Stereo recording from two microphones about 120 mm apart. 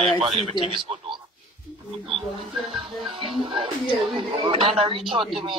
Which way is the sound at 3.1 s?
55° right (ahead or behind).